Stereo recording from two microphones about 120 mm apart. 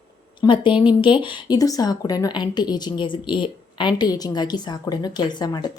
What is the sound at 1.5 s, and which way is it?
A woman's voice, 30° left (ahead or behind).